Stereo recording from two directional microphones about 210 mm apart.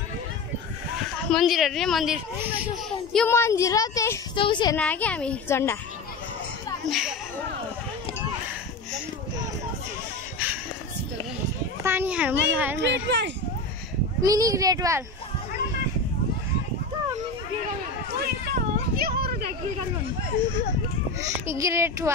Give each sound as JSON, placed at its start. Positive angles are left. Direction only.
{"t": 1.3, "sound": "a woman's voice", "side_deg": 0}
{"t": 3.1, "sound": "a child's voice", "side_deg": 5}
{"t": 4.7, "sound": "speech", "side_deg": 5}
{"t": 6.9, "sound": "a woman's voice", "side_deg": 0}
{"t": 11.8, "sound": "speech", "side_deg": -10}
{"t": 12.8, "sound": "speech", "side_deg": -55}
{"t": 14.2, "sound": "speech", "side_deg": -15}
{"t": 18.2, "sound": "children playing", "side_deg": -45}
{"t": 21.5, "sound": "speech", "side_deg": -15}